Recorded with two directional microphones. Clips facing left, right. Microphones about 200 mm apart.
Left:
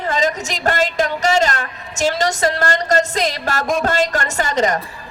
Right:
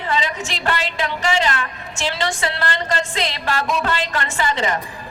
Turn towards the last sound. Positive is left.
turn(degrees=45)  # may be behind; listen again after turning